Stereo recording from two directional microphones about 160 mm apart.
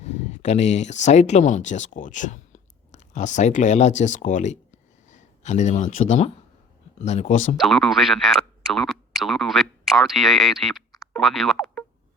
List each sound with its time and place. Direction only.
0.0 s speech: 45° left (ahead or behind)
7.6 s speech: centre (ahead or behind)
11.1 s boing: centre (ahead or behind)